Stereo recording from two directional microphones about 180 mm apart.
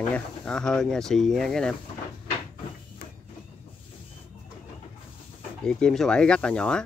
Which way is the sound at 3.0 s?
55° left (ahead or behind).